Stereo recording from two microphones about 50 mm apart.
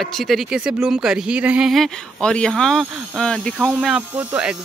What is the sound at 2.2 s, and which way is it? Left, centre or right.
Speech, centre.